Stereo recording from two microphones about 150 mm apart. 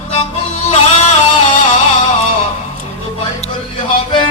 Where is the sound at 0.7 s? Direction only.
45° left (ahead or behind).